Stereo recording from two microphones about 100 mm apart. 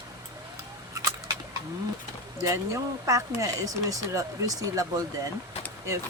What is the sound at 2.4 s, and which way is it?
Speech, 35° right (ahead or behind).